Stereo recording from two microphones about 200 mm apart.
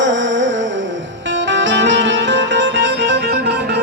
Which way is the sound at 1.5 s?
65° right (ahead or behind).